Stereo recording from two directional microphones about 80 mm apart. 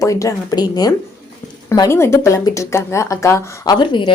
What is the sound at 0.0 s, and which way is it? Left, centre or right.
Speech, left.